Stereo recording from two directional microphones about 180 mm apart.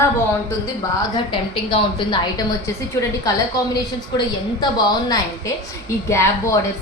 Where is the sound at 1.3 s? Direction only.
30° left (ahead or behind).